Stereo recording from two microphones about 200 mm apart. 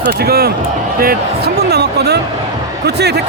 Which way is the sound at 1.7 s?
55° right (ahead or behind).